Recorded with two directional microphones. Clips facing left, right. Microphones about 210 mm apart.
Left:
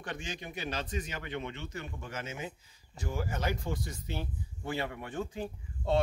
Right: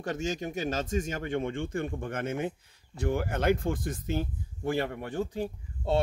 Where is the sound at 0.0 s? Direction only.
40° right (ahead or behind).